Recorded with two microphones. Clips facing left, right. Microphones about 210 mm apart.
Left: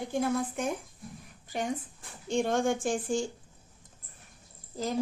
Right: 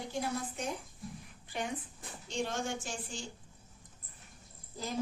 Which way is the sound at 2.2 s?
50° left (ahead or behind).